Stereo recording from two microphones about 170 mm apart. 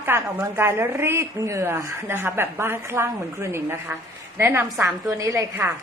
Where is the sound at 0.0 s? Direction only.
15° right (ahead or behind).